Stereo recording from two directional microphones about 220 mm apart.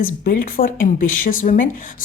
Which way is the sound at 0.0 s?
40° left (ahead or behind).